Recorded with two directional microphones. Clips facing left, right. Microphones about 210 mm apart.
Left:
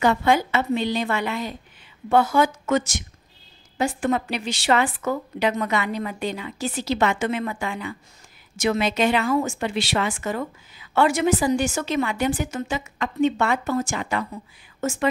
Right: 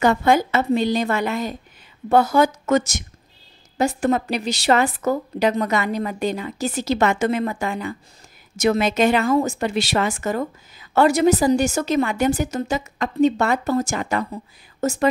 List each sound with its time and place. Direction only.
0.0 s a woman's voice: 45° right (ahead or behind)